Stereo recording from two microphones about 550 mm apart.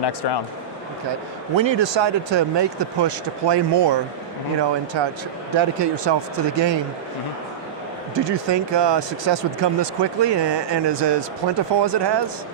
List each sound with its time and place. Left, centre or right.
0.0 s speech: left
1.5 s speech: right
5.0 s speech: right
8.1 s speech: right